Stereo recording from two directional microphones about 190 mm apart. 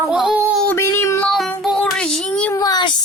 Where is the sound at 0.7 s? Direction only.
15° left (ahead or behind).